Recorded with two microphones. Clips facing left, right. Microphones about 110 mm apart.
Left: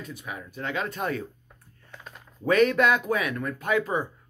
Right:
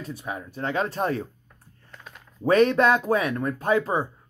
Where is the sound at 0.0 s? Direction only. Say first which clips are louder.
Right 4 dB; 35° right (ahead or behind).